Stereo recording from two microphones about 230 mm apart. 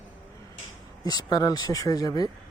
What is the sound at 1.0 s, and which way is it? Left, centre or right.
Speech, centre.